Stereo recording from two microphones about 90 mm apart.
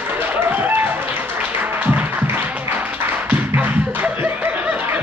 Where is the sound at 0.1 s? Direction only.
20° right (ahead or behind).